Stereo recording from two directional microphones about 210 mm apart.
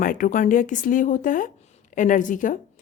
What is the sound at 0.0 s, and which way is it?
Speech, 40° left (ahead or behind).